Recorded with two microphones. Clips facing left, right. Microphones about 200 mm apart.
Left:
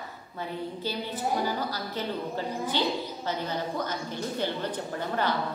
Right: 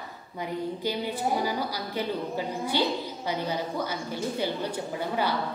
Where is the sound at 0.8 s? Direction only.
15° right (ahead or behind).